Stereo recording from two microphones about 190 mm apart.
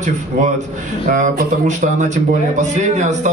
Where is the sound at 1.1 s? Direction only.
40° right (ahead or behind).